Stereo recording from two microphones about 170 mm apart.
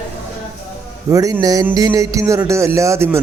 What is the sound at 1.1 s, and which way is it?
A man's voice, 20° right (ahead or behind).